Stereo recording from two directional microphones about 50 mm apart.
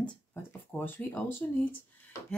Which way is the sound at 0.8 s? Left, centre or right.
Left.